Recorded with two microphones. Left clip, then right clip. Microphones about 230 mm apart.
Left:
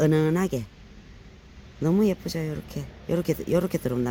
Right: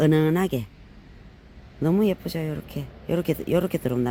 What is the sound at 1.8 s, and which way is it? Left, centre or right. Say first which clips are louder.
Speech: right 1 dB; centre.